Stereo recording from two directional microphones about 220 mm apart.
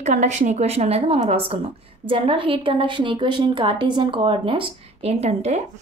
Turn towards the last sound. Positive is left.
turn(degrees=-30)  # may be behind; listen again after turning